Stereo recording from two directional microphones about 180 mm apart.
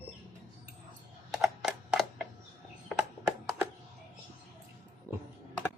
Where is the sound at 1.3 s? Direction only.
Centre (ahead or behind).